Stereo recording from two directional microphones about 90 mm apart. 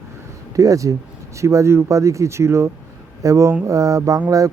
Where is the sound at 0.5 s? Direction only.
40° right (ahead or behind).